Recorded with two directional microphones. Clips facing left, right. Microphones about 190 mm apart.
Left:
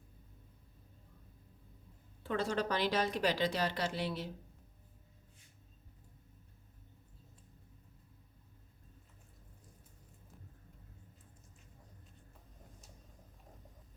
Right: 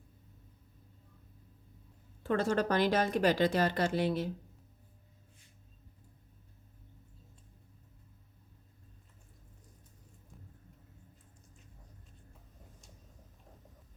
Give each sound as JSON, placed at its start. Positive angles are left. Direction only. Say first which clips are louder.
{"t": 2.2, "sound": "speech", "louder": "right 5 dB", "side_deg": -45}